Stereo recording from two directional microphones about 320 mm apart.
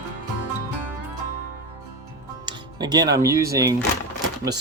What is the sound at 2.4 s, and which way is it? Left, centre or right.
Speech, centre.